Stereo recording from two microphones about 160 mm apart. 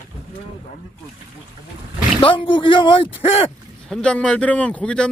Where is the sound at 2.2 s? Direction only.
35° left (ahead or behind).